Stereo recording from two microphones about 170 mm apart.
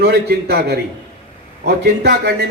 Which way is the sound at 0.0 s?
70° right (ahead or behind).